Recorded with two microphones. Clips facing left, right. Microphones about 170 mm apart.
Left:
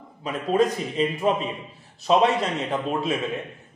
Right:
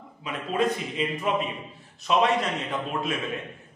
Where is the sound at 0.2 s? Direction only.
40° left (ahead or behind).